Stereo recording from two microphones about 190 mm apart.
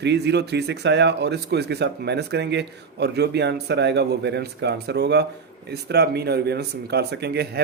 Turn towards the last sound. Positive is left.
turn(degrees=-60)  # may be behind; listen again after turning